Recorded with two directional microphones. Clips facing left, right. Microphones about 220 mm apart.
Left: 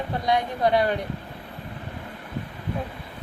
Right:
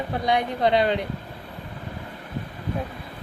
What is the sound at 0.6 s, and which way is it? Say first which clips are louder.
Speech: right 1 dB; 20° right (ahead or behind).